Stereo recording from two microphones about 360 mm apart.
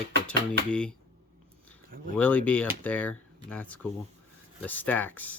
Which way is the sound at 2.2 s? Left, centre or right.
Centre.